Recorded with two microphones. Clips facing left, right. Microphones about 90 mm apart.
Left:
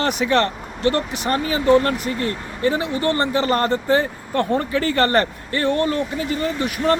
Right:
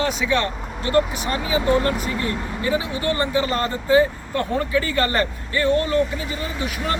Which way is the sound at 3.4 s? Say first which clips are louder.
Left 4 dB; 50° left (ahead or behind).